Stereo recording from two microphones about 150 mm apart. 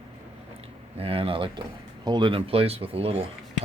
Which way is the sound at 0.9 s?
40° right (ahead or behind).